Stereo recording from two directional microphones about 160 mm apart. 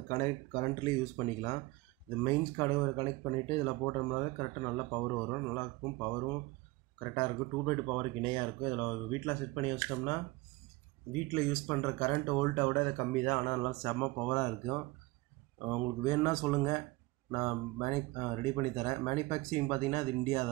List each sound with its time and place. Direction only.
0.1 s speech: 25° left (ahead or behind)
11.3 s speech: 15° left (ahead or behind)